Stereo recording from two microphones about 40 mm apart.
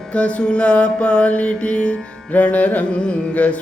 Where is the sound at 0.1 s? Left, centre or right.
Left.